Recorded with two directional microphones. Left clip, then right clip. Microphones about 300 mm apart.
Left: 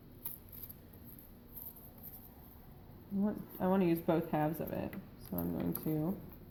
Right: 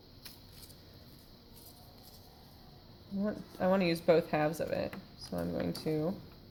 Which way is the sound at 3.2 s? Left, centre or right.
Right.